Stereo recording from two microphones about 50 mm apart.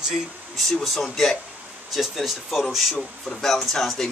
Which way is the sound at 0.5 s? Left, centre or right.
Centre.